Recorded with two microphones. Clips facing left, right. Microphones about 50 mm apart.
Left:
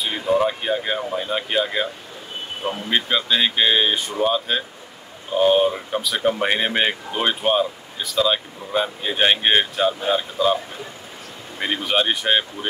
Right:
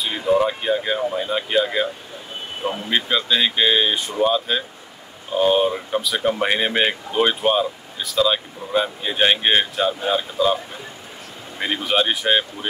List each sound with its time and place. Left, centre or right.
0.0 s speech: centre
2.9 s speech: centre